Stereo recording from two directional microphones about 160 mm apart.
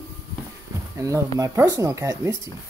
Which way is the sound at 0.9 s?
20° right (ahead or behind).